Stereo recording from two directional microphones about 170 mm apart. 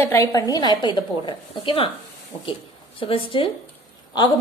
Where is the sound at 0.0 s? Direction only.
15° left (ahead or behind).